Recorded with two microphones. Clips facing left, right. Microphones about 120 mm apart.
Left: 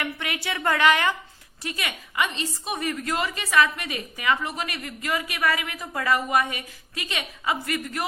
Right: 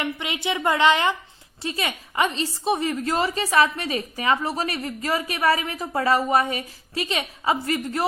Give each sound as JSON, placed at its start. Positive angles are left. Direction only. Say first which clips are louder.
{"t": 0.0, "sound": "a woman's voice", "louder": "right 3 dB", "side_deg": -20}